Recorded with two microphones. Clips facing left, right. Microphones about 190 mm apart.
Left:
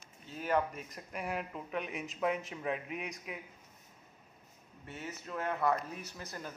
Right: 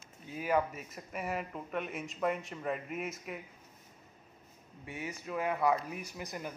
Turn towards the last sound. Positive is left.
turn(degrees=-15)  # may be behind; listen again after turning